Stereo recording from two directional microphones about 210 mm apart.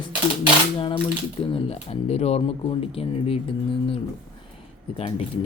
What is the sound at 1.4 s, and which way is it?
Speech, 25° left (ahead or behind).